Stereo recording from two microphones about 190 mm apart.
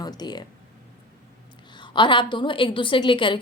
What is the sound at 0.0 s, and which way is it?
Speech, 20° left (ahead or behind).